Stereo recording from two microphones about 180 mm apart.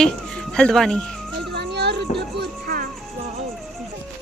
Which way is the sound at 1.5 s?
70° right (ahead or behind).